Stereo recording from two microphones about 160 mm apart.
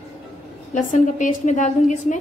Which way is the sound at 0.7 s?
55° left (ahead or behind).